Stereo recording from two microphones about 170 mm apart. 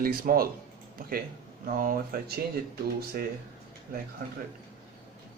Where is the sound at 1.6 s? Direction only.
55° right (ahead or behind).